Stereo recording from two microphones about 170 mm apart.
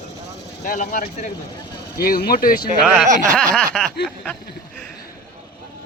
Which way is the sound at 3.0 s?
45° right (ahead or behind).